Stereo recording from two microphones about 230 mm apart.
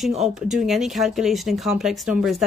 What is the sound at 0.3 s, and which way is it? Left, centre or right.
Speech, centre.